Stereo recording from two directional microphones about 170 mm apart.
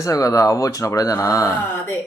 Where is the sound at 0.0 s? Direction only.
20° left (ahead or behind).